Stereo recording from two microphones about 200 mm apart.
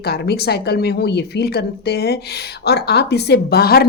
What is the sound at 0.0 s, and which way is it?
Speech, 50° left (ahead or behind).